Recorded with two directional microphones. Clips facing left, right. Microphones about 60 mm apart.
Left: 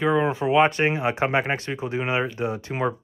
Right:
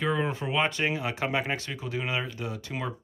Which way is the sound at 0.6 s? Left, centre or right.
Left.